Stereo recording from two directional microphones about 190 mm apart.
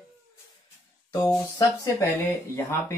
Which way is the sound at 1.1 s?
15° left (ahead or behind).